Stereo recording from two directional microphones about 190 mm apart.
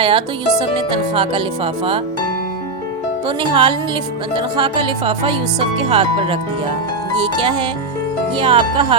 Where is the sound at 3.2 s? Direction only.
25° right (ahead or behind).